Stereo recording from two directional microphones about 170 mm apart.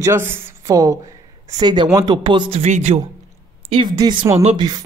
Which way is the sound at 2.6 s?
40° right (ahead or behind).